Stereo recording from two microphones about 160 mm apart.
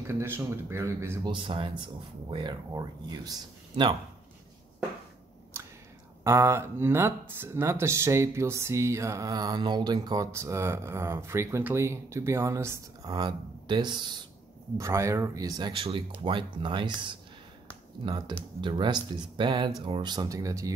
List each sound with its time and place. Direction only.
0.0 s speech: 15° right (ahead or behind)
1.2 s speech: 30° right (ahead or behind)
6.2 s speech: 15° right (ahead or behind)